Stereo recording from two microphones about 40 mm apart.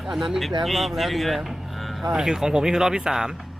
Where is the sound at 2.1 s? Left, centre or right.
Centre.